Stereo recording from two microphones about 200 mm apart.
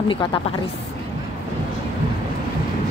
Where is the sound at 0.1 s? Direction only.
25° left (ahead or behind).